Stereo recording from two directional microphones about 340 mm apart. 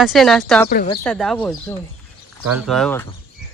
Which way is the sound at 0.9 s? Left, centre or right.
Centre.